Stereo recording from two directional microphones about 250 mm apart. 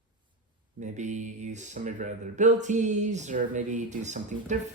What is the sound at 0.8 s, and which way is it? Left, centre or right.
Speech, right.